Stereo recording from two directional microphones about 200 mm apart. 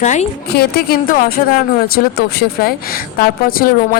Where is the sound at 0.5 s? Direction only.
50° left (ahead or behind).